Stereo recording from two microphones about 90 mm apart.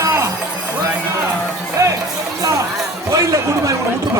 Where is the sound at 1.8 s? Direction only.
35° right (ahead or behind).